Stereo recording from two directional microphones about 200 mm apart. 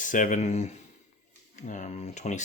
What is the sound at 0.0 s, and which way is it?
Speech, 40° left (ahead or behind).